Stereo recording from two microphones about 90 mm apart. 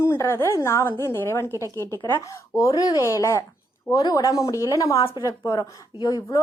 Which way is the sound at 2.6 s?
40° left (ahead or behind).